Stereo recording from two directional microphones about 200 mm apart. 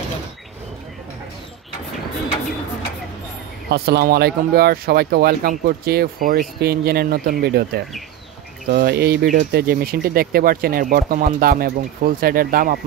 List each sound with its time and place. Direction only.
3.7 s speech: 50° right (ahead or behind)